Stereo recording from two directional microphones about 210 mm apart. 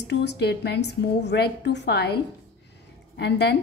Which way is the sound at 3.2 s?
50° left (ahead or behind).